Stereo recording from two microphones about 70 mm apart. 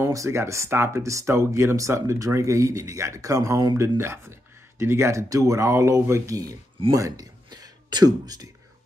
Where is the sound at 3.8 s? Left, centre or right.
Right.